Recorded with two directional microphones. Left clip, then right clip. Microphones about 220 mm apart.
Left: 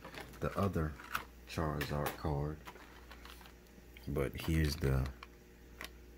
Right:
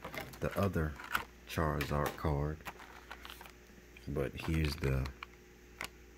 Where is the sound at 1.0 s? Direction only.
30° right (ahead or behind).